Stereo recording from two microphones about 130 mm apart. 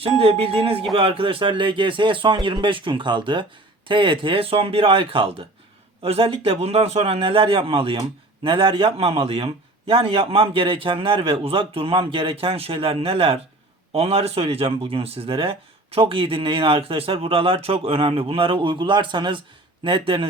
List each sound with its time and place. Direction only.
0.0 s speech: 50° right (ahead or behind)